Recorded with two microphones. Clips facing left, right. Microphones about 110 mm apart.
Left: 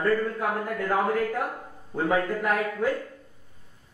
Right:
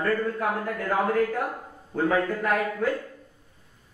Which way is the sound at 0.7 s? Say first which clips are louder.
Right 1 dB; 5° left (ahead or behind).